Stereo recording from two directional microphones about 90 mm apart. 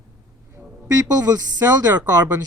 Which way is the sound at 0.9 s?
45° right (ahead or behind).